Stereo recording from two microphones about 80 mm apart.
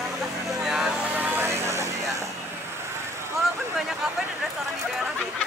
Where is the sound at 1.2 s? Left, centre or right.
Right.